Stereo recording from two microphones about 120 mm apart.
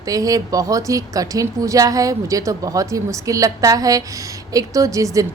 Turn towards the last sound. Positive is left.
turn(degrees=-30)  # may be behind; listen again after turning